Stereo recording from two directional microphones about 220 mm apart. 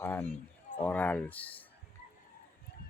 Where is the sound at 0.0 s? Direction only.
10° left (ahead or behind).